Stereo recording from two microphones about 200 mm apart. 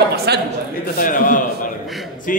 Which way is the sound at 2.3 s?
45° left (ahead or behind).